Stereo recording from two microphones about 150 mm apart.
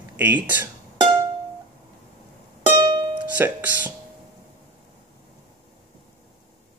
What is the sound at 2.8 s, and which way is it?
Music, 30° right (ahead or behind).